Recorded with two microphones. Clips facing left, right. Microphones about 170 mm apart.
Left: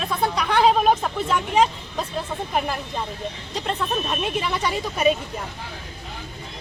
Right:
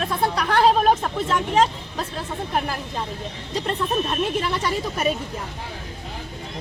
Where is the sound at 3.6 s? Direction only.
Centre (ahead or behind).